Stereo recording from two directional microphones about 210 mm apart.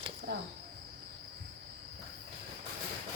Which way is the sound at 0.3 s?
50° right (ahead or behind).